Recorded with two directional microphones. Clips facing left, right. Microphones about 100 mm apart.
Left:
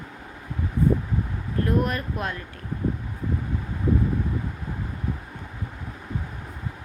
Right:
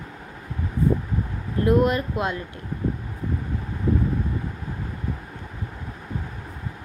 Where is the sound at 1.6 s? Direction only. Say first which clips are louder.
Right 6 dB; 20° right (ahead or behind).